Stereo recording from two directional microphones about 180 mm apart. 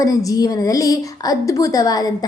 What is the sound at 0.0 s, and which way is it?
A woman's voice, 20° left (ahead or behind).